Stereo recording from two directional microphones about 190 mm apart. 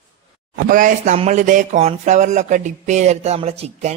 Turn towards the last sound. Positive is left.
turn(degrees=-35)  # may be behind; listen again after turning